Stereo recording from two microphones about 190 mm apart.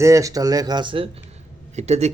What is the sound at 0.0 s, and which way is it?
Speech, 15° right (ahead or behind).